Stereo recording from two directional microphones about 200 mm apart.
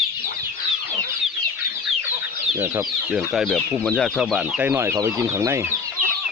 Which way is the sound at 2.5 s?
15° right (ahead or behind).